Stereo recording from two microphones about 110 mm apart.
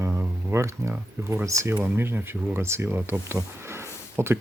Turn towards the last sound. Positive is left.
turn(degrees=-20)  # may be behind; listen again after turning